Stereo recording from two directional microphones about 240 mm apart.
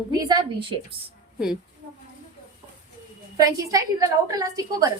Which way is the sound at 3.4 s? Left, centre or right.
Centre.